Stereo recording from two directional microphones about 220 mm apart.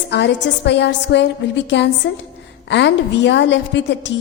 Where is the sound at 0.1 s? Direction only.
55° left (ahead or behind).